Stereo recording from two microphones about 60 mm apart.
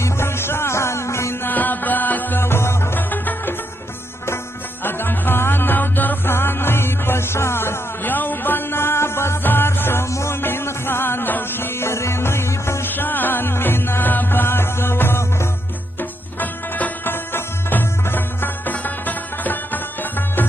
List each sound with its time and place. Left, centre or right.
0.0 s music: left
3.0 s music: left
4.8 s music: left
10.0 s music: left
12.8 s music: left
16.0 s music: left